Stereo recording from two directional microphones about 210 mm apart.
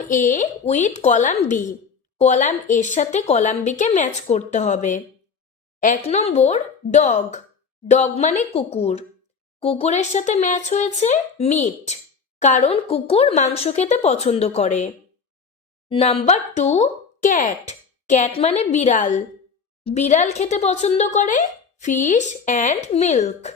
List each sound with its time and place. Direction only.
0.1 s speech: 35° left (ahead or behind)
15.9 s speech: 30° left (ahead or behind)